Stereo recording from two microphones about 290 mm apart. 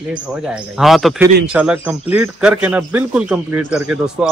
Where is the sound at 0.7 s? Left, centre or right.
Centre.